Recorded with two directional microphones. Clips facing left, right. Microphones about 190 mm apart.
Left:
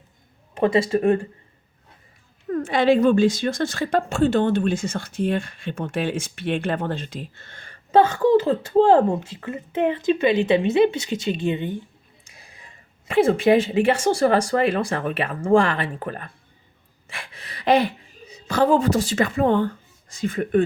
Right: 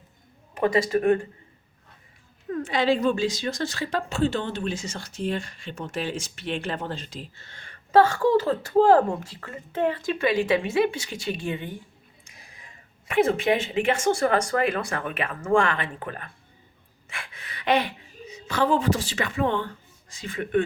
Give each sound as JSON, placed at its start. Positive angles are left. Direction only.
{"t": 0.5, "sound": "speech", "side_deg": 25}
{"t": 2.5, "sound": "a woman's voice", "side_deg": 50}
{"t": 7.9, "sound": "speech", "side_deg": 20}
{"t": 12.2, "sound": "a sound", "side_deg": 30}
{"t": 13.1, "sound": "speech", "side_deg": 30}